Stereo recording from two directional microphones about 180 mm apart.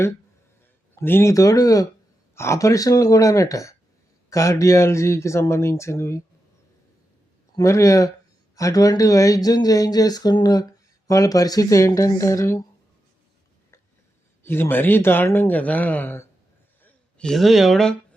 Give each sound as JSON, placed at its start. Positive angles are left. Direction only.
{"t": 0.9, "sound": "speech", "side_deg": 15}
{"t": 7.5, "sound": "speech", "side_deg": 15}
{"t": 14.4, "sound": "speech", "side_deg": 10}